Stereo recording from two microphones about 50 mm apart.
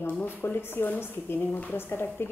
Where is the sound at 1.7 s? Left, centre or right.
Left.